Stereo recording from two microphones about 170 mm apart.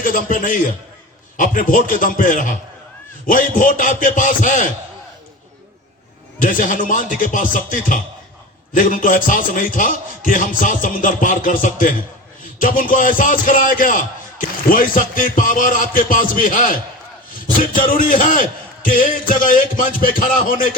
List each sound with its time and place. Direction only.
0.0 s a man's voice: 55° left (ahead or behind)
6.4 s a man's voice: 50° left (ahead or behind)